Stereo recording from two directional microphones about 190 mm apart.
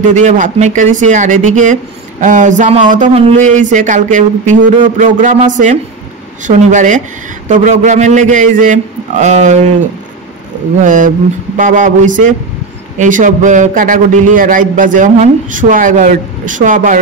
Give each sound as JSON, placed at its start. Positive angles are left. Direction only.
{"t": 0.0, "sound": "speech", "side_deg": -40}
{"t": 10.8, "sound": "a man's voice", "side_deg": -45}